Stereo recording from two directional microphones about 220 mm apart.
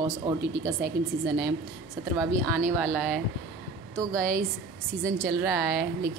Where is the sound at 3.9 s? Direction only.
15° right (ahead or behind).